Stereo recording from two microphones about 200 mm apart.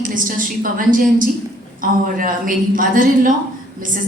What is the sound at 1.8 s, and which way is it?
A woman's voice, 45° right (ahead or behind).